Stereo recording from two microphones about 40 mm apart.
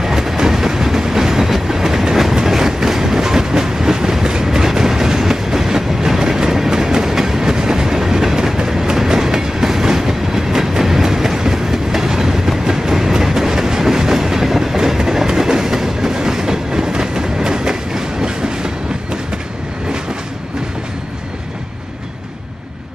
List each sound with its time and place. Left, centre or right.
0.0 s train: centre